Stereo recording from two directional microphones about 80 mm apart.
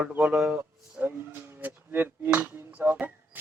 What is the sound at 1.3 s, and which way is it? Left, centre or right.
Speech, right.